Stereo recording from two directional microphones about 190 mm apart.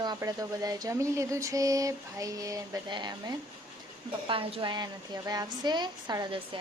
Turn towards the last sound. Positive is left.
turn(degrees=-25)  # may be behind; listen again after turning